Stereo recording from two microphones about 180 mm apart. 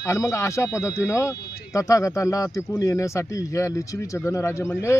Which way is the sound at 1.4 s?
60° left (ahead or behind).